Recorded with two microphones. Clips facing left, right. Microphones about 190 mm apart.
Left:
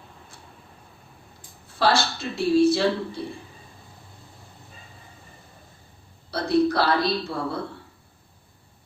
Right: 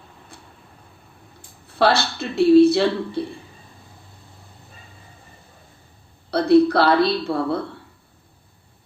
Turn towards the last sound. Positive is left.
turn(degrees=-60)  # may be behind; listen again after turning